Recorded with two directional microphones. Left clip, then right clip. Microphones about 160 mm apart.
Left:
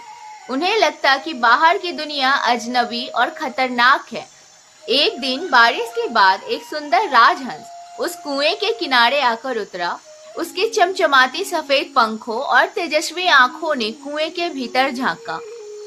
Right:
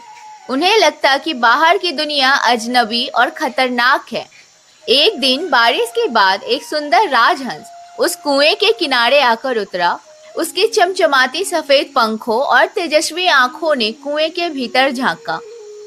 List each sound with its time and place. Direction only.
0.4 s a woman's voice: 35° right (ahead or behind)